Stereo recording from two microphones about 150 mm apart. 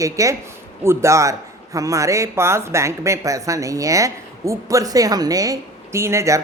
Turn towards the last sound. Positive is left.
turn(degrees=-20)  # may be behind; listen again after turning